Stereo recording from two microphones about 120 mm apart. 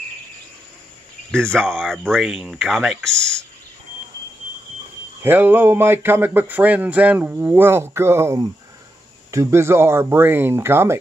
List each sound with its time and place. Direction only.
1.3 s speech: 5° left (ahead or behind)
5.2 s speech: 15° right (ahead or behind)